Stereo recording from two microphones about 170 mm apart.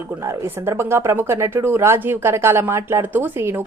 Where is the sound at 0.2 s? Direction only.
15° right (ahead or behind).